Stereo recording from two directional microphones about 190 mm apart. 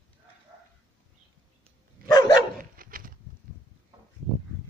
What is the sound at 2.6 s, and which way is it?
Dog, 50° right (ahead or behind).